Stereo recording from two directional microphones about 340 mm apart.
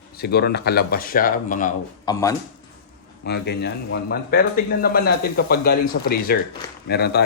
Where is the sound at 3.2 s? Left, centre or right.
Left.